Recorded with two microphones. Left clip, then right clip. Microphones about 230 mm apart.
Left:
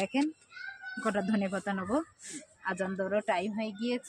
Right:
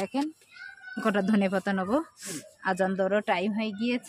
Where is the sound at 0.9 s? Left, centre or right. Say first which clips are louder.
Right 5 dB; right.